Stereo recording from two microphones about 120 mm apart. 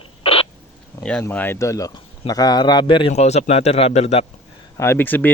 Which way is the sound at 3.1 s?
65° left (ahead or behind).